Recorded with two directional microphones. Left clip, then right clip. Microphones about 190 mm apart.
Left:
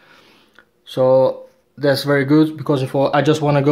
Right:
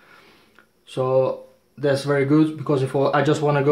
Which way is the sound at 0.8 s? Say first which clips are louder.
Left 7 dB; 30° left (ahead or behind).